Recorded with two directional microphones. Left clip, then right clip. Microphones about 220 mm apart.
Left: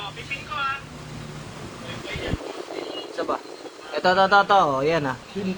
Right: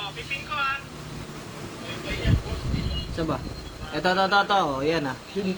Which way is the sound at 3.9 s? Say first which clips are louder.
Left 4 dB; 25° left (ahead or behind).